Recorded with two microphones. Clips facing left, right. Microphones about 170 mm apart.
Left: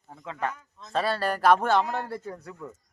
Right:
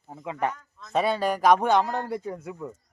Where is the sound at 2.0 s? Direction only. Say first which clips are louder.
Right 4 dB; 15° right (ahead or behind).